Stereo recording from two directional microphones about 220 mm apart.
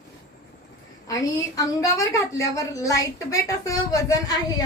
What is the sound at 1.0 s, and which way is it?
A woman's voice, 15° left (ahead or behind).